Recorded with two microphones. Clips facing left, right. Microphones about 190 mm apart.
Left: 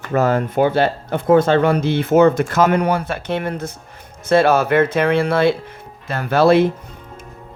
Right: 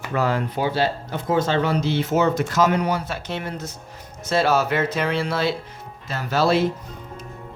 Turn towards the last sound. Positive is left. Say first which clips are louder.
# left 6 dB
turn(degrees=55)  # may be behind; listen again after turning